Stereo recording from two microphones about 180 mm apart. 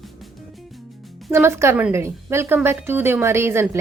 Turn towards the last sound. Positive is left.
turn(degrees=-15)  # may be behind; listen again after turning